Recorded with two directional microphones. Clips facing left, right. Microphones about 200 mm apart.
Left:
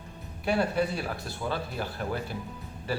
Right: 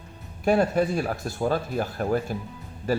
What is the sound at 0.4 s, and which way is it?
Speech, 45° right (ahead or behind).